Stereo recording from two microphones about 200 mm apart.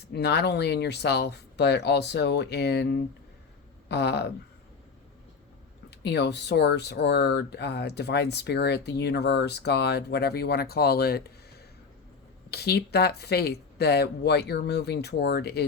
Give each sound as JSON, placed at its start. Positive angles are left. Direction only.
{"t": 0.1, "sound": "speech", "side_deg": 55}
{"t": 5.9, "sound": "speech", "side_deg": 55}
{"t": 12.5, "sound": "speech", "side_deg": 55}